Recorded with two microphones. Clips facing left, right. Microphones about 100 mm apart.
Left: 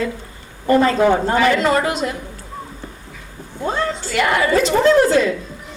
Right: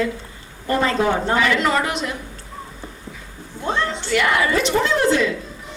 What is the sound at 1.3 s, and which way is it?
Speech, 35° left (ahead or behind).